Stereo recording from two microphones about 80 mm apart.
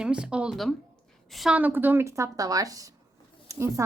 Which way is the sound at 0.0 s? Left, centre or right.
Centre.